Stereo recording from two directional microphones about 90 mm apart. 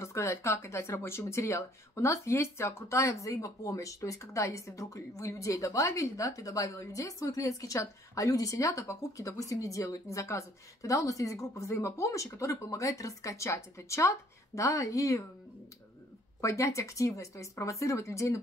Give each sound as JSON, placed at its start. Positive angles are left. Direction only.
{"t": 0.0, "sound": "speech", "side_deg": 35}
{"t": 16.3, "sound": "speech", "side_deg": 35}